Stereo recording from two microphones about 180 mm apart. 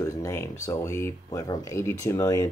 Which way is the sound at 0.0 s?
15° left (ahead or behind).